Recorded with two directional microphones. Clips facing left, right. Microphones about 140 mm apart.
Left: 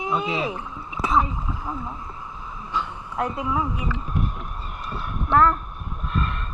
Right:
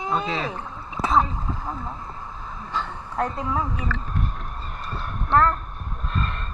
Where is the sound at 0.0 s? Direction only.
10° left (ahead or behind).